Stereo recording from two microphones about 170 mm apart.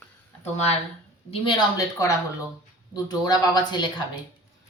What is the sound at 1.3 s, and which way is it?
Speech, 25° left (ahead or behind).